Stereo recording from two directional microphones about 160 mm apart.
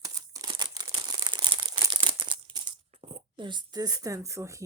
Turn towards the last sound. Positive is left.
turn(degrees=-20)  # may be behind; listen again after turning